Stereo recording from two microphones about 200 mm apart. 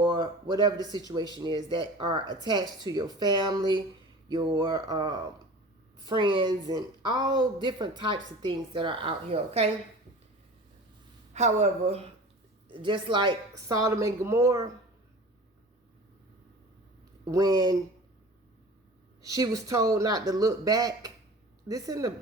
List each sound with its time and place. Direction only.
0.0 s a woman's voice: 20° right (ahead or behind)
11.3 s a woman's voice: 35° right (ahead or behind); by 14.7 s 15° right (ahead or behind)
17.3 s a woman's voice: 20° right (ahead or behind)
19.2 s a woman's voice: 15° right (ahead or behind)